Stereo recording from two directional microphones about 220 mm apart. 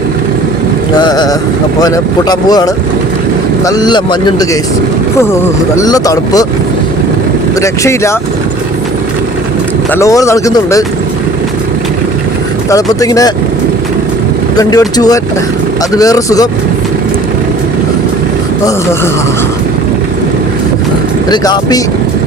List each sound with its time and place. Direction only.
0.9 s boat: 20° left (ahead or behind)
1.8 s speech: 20° left (ahead or behind)
7.6 s speech: 15° left (ahead or behind)
9.9 s speech: 15° left (ahead or behind)
12.7 s speech: 15° left (ahead or behind)
14.5 s speech: 15° left (ahead or behind)
21.2 s speech: 20° left (ahead or behind)